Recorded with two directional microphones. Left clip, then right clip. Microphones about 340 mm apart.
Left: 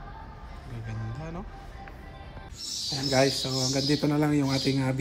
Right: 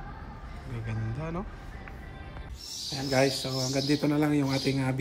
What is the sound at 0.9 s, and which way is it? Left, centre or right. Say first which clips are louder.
Speech: right 3 dB; centre.